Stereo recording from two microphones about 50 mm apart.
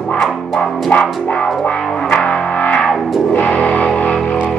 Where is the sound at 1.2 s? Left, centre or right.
Left; by 3.2 s centre.